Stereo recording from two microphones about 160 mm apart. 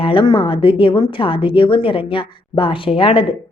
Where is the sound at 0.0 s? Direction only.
30° left (ahead or behind).